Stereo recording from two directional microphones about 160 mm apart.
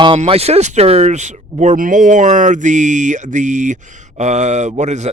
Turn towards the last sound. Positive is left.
turn(degrees=-45)  # may be behind; listen again after turning